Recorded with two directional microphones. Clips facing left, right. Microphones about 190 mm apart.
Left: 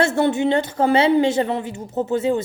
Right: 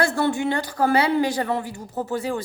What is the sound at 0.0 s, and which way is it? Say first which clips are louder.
A woman's voice: left 4 dB; 20° left (ahead or behind).